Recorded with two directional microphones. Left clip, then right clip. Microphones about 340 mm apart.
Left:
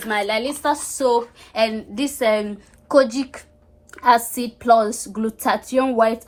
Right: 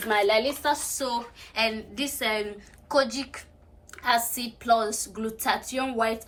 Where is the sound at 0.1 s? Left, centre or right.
Left.